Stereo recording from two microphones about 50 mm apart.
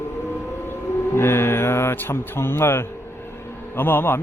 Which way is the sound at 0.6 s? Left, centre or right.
Left.